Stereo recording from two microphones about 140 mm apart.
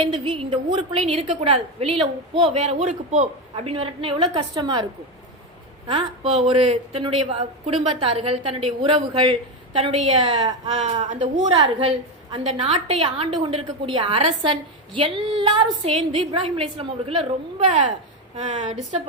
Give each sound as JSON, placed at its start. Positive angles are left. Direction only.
{"t": 0.0, "sound": "a woman's voice", "side_deg": -40}
{"t": 2.4, "sound": "a woman's voice", "side_deg": -50}
{"t": 5.9, "sound": "a woman's voice", "side_deg": -40}
{"t": 11.0, "sound": "a woman's voice", "side_deg": -65}
{"t": 11.8, "sound": "a woman's voice", "side_deg": -45}
{"t": 18.8, "sound": "a woman's voice", "side_deg": -50}